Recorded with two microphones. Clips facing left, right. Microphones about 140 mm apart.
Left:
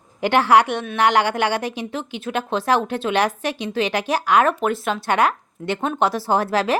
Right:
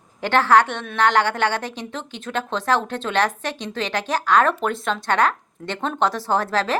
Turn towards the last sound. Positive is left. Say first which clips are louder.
# left 2 dB
turn(degrees=10)  # may be behind; listen again after turning